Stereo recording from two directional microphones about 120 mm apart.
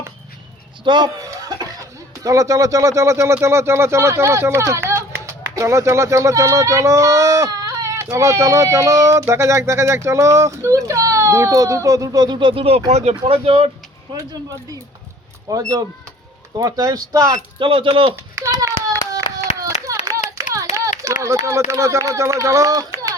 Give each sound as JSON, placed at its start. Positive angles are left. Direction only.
{"t": 0.9, "sound": "speech", "side_deg": -35}
{"t": 12.9, "sound": "speech", "side_deg": -65}
{"t": 15.4, "sound": "speech", "side_deg": -30}
{"t": 17.6, "sound": "speech", "side_deg": -45}
{"t": 18.6, "sound": "clapping", "side_deg": -25}
{"t": 21.0, "sound": "a sound", "side_deg": -25}
{"t": 21.7, "sound": "speech", "side_deg": -25}